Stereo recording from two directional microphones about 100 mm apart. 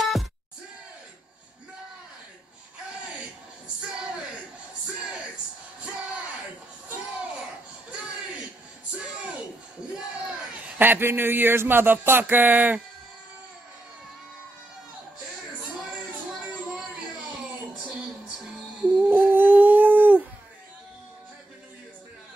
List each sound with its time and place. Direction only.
0.0 s music: centre (ahead or behind)
3.8 s a sound: 10° right (ahead or behind)
9.9 s speech: 10° right (ahead or behind)
18.8 s dog: 15° right (ahead or behind)